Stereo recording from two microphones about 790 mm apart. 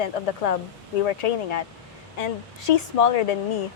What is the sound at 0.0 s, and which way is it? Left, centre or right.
Speech, left.